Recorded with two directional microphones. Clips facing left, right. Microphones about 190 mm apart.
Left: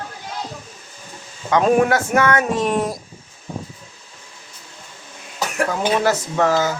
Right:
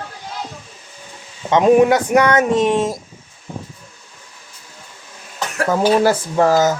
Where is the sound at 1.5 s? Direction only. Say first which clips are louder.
Right 4 dB; 20° right (ahead or behind).